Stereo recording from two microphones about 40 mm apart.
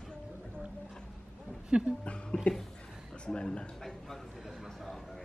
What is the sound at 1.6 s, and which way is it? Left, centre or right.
Speech, right.